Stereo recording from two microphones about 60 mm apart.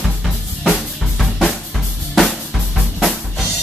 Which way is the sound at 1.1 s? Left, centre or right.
Centre.